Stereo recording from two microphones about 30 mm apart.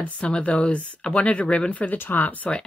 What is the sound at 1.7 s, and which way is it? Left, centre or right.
Speech, left.